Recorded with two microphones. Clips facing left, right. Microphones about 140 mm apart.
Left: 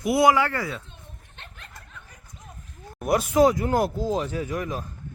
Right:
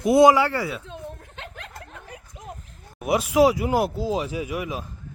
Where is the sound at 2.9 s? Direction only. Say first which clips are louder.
Right 1 dB; 5° right (ahead or behind).